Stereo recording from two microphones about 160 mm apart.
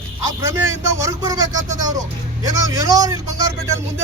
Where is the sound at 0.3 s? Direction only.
20° right (ahead or behind).